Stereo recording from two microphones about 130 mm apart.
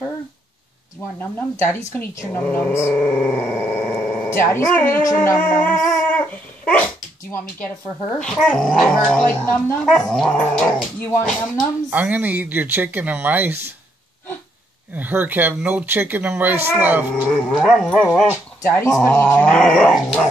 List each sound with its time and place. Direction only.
1.2 s speech: 15° left (ahead or behind)
4.7 s dog: 20° left (ahead or behind)
7.2 s speech: 20° left (ahead or behind)
8.2 s speech: 5° left (ahead or behind)
9.8 s dog: 5° left (ahead or behind)
11.9 s speech: 10° right (ahead or behind)
15.0 s speech: 15° right (ahead or behind)
17.1 s speech: 10° left (ahead or behind)